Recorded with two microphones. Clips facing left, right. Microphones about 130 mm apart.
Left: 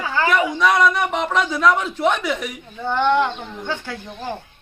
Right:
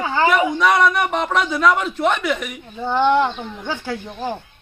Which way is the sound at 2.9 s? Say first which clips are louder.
Right 2 dB; 10° right (ahead or behind).